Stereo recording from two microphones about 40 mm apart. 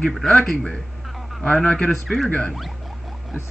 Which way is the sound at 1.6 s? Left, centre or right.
Left.